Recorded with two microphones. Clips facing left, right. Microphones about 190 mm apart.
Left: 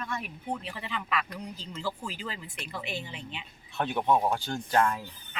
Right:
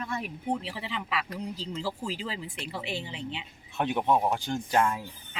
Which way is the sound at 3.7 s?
15° right (ahead or behind).